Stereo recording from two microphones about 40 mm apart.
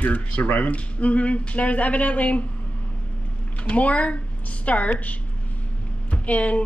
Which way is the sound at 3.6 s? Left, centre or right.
Left.